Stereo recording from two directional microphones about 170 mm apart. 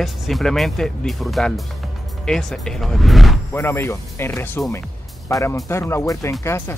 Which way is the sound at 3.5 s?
15° left (ahead or behind).